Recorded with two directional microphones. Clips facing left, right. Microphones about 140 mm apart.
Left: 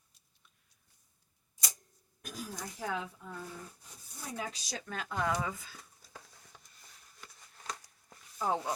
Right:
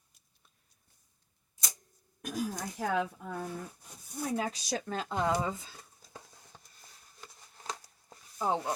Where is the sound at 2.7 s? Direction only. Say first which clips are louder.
Right 6 dB; 60° right (ahead or behind).